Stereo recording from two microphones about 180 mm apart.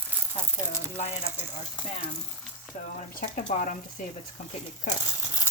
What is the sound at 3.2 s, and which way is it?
Speech, 45° left (ahead or behind).